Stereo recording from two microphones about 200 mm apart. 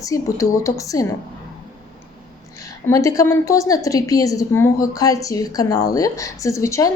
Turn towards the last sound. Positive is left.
turn(degrees=15)  # may be behind; listen again after turning